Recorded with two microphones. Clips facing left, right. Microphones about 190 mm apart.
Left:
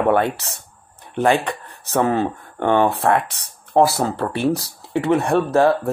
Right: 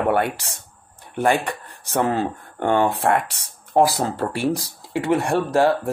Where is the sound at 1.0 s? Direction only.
10° right (ahead or behind).